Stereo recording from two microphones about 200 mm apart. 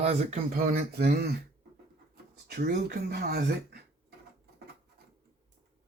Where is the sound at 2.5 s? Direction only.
55° right (ahead or behind).